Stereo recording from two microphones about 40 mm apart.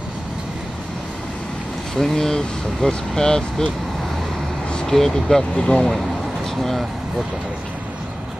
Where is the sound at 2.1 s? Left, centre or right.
Centre.